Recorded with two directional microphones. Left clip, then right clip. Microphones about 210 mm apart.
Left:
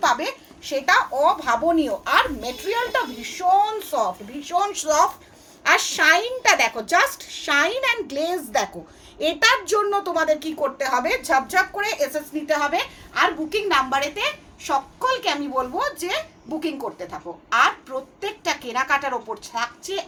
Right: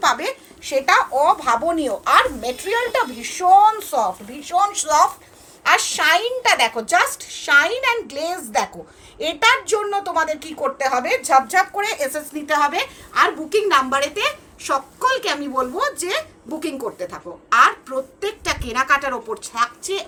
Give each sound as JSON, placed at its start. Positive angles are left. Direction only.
{"t": 0.0, "sound": "a woman's voice", "side_deg": 15}